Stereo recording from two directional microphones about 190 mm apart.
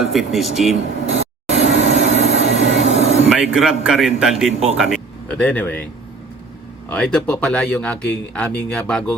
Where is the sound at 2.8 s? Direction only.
35° left (ahead or behind).